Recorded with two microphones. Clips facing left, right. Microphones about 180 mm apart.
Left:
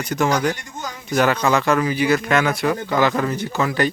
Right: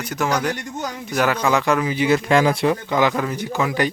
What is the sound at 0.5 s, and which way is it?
Speech, 65° right (ahead or behind).